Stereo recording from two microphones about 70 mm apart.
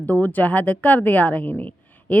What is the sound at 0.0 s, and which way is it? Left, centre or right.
A woman's voice, left.